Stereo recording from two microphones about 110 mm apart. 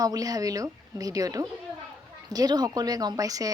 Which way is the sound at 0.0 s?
35° right (ahead or behind).